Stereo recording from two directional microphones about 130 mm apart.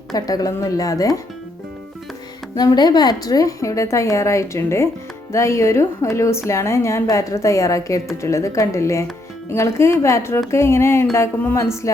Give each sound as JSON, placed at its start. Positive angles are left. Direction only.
{"t": 0.1, "sound": "speech", "side_deg": 30}
{"t": 2.6, "sound": "speech", "side_deg": 30}